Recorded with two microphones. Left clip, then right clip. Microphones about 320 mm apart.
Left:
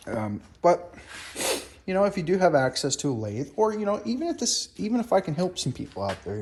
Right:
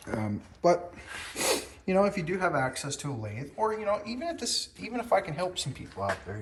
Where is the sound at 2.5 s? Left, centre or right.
Right.